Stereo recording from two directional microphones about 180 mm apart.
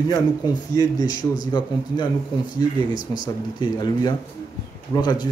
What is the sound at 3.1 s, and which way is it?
Speech, 25° left (ahead or behind).